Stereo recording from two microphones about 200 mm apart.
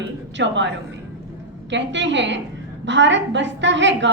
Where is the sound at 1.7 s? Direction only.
65° right (ahead or behind).